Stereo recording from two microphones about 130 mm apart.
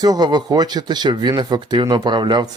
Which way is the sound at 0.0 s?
30° right (ahead or behind).